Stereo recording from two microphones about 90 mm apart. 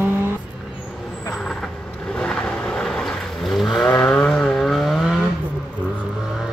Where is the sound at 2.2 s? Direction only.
10° left (ahead or behind).